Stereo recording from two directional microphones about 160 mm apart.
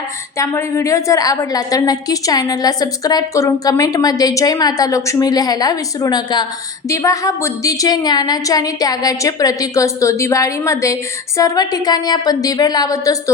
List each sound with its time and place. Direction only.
0.3 s a woman's voice: 20° left (ahead or behind)